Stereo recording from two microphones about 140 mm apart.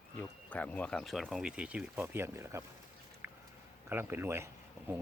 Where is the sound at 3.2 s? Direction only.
20° right (ahead or behind).